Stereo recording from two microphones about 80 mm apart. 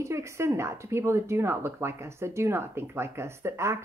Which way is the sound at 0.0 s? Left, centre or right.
Right.